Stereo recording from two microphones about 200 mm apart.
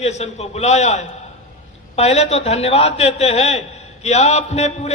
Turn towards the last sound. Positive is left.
turn(degrees=30)  # may be behind; listen again after turning